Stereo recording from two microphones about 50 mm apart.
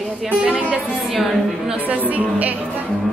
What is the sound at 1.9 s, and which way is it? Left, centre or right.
Speech, right.